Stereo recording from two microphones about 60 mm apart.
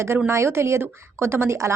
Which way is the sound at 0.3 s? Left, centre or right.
Right.